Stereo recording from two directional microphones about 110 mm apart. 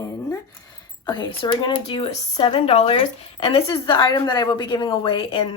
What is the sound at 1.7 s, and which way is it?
Speech, 60° left (ahead or behind).